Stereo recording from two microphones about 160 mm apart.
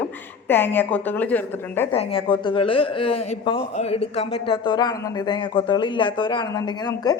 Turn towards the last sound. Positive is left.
turn(degrees=25)  # may be behind; listen again after turning